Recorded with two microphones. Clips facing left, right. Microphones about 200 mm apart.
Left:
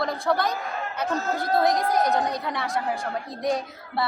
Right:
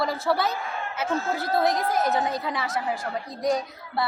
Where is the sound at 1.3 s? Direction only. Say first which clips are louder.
Left 3 dB; 5° right (ahead or behind).